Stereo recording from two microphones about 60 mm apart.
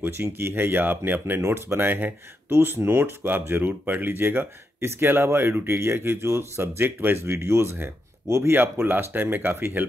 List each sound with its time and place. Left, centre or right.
0.0 s speech: right
1.4 s speech: right